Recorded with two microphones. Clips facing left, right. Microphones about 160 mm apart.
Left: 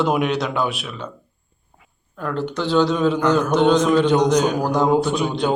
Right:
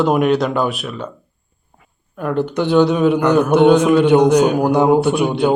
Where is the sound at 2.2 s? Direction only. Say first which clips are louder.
Right 5 dB; 15° right (ahead or behind).